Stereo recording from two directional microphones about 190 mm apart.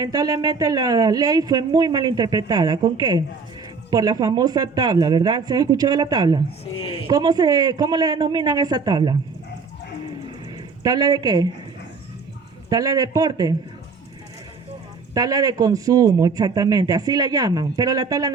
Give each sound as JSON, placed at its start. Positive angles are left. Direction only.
{"t": 0.0, "sound": "speech", "side_deg": -20}
{"t": 6.7, "sound": "a man's voice", "side_deg": 30}
{"t": 7.1, "sound": "speech", "side_deg": -20}
{"t": 10.8, "sound": "speech", "side_deg": -20}
{"t": 12.7, "sound": "speech", "side_deg": -20}
{"t": 15.1, "sound": "speech", "side_deg": -20}